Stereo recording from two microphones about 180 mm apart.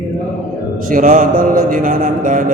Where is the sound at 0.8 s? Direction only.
45° right (ahead or behind).